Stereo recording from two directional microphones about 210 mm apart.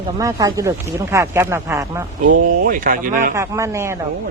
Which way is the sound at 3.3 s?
15° right (ahead or behind).